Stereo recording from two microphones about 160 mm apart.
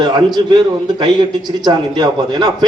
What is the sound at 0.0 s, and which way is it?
A man's voice, 25° right (ahead or behind).